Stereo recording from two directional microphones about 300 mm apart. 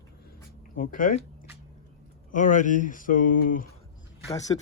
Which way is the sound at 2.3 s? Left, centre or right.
Left.